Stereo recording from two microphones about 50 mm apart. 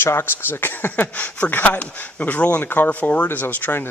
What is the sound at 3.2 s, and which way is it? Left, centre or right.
Speech, left.